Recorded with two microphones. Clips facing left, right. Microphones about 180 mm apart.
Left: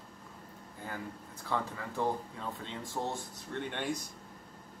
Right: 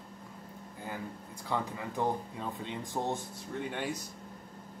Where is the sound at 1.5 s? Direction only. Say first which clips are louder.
Right 1 dB; 15° right (ahead or behind).